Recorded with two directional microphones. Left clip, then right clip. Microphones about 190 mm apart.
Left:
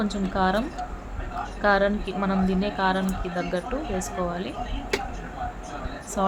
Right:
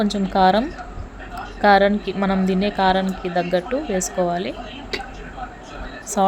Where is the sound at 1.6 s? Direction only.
30° right (ahead or behind).